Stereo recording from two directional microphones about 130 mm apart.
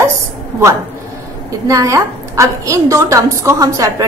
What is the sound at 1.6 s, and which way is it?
A woman's voice, 25° right (ahead or behind).